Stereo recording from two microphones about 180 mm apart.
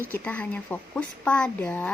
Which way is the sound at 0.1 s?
10° left (ahead or behind).